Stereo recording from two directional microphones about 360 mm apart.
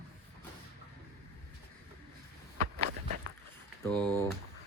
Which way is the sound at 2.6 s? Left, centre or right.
Right.